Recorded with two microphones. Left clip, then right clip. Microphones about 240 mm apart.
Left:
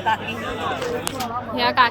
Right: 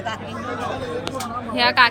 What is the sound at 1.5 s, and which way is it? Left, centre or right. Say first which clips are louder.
Speech: right 2 dB; centre.